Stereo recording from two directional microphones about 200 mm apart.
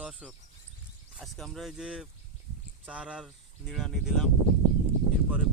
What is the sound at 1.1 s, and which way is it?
Speech, centre (ahead or behind).